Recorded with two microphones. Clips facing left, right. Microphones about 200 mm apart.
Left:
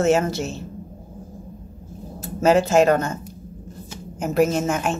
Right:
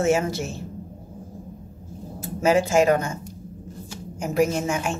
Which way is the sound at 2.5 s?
10° right (ahead or behind).